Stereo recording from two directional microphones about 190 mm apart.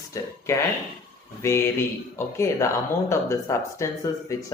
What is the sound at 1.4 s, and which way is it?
Speech, 15° left (ahead or behind).